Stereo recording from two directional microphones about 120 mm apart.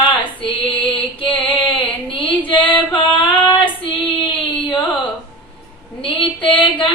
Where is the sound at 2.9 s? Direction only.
45° left (ahead or behind).